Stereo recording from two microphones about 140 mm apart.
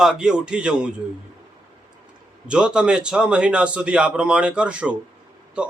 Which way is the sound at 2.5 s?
5° right (ahead or behind).